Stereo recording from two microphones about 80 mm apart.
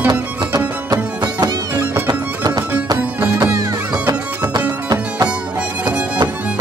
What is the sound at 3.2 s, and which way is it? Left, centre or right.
Music, right.